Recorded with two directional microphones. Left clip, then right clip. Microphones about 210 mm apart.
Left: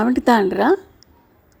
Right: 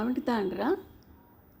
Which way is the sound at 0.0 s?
40° left (ahead or behind).